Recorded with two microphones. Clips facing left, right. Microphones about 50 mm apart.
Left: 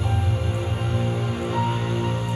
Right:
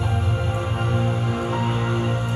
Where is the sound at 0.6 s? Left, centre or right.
Right.